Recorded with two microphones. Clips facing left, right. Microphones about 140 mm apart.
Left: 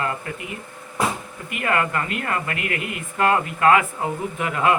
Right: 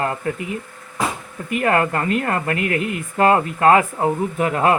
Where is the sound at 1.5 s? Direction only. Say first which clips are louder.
Right 5 dB; 35° right (ahead or behind).